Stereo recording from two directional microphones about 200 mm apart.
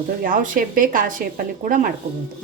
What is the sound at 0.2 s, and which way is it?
Speech, 45° right (ahead or behind).